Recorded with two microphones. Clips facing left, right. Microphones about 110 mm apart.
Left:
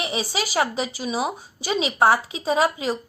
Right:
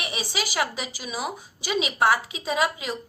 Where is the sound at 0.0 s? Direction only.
30° left (ahead or behind).